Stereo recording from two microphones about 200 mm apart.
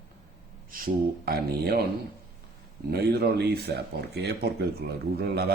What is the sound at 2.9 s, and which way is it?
A man's voice, 55° right (ahead or behind).